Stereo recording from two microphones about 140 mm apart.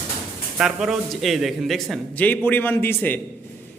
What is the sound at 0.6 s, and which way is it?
Speech, 5° right (ahead or behind).